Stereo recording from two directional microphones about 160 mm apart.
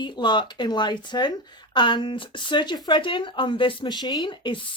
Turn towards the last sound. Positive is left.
turn(degrees=30)  # may be behind; listen again after turning